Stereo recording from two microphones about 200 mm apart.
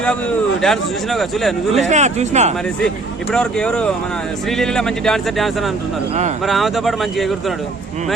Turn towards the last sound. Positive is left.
turn(degrees=0)  # may be behind; listen again after turning